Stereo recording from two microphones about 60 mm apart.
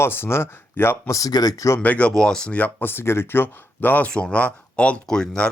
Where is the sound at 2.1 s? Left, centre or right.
Centre.